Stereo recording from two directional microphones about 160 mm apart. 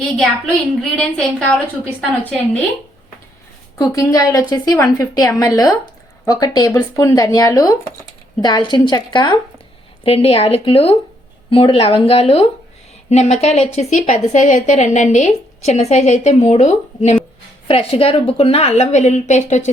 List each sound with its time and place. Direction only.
0.2 s a woman's voice: 5° left (ahead or behind)
3.8 s a woman's voice: 20° left (ahead or behind); by 19.7 s 45° left (ahead or behind)